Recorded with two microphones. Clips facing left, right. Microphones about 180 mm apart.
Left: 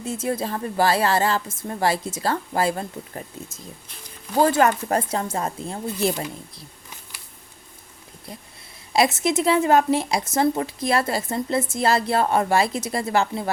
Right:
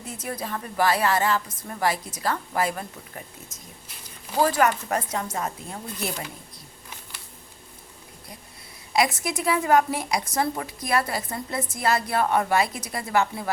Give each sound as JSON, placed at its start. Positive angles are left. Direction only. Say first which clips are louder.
{"t": 0.0, "sound": "a woman's voice", "louder": "left 7 dB", "side_deg": 25}
{"t": 8.9, "sound": "a woman's voice", "louder": "left 4 dB", "side_deg": 25}